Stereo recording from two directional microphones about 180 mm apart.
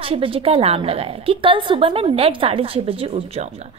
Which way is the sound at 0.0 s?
30° right (ahead or behind).